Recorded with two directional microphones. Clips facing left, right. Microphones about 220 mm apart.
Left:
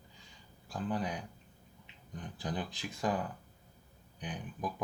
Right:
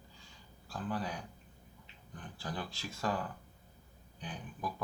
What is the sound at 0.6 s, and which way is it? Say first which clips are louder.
Speech: left 2 dB; 20° left (ahead or behind).